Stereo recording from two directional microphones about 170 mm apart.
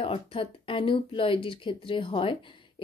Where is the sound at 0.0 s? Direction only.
30° left (ahead or behind).